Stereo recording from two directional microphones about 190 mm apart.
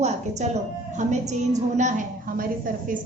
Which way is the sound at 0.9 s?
35° right (ahead or behind).